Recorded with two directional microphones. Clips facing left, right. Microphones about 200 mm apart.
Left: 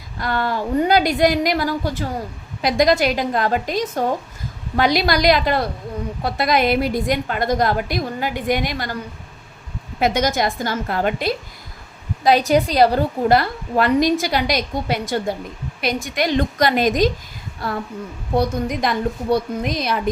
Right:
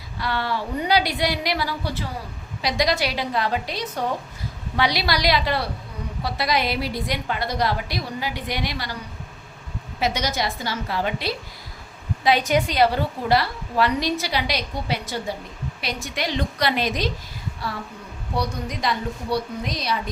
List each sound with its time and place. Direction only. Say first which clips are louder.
0.2 s a woman's voice: left 4 dB; 45° left (ahead or behind)
10.0 s a woman's voice: left 6 dB; 50° left (ahead or behind)
12.2 s a woman's voice: left 5 dB; 40° left (ahead or behind)